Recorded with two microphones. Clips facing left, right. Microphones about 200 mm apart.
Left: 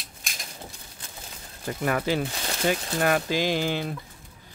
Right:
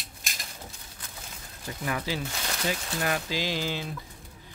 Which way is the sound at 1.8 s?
55° left (ahead or behind).